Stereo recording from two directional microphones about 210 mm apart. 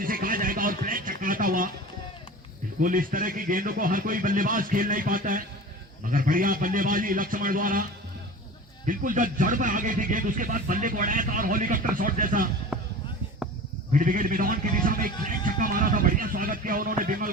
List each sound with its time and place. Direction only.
0.0 s a sound: 40° right (ahead or behind)
2.8 s speech: 40° right (ahead or behind)
8.9 s speech: 40° right (ahead or behind)
12.7 s basketball bounce: 5° right (ahead or behind)
13.9 s speech: 40° right (ahead or behind)